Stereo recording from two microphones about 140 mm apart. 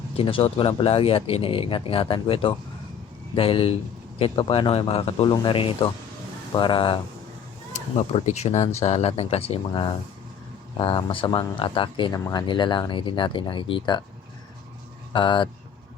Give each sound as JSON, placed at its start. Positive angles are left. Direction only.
{"t": 0.2, "sound": "speech", "side_deg": 40}
{"t": 7.7, "sound": "speech", "side_deg": 50}
{"t": 15.1, "sound": "speech", "side_deg": 35}